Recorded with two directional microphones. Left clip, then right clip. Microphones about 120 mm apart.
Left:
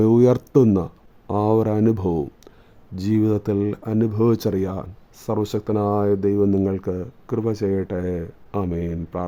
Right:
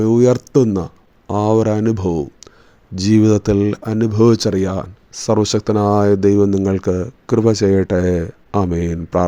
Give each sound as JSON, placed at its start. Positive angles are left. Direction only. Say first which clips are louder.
{"t": 0.0, "sound": "speech", "louder": "right 3 dB", "side_deg": 5}
{"t": 2.9, "sound": "speech", "louder": "right 7 dB", "side_deg": -15}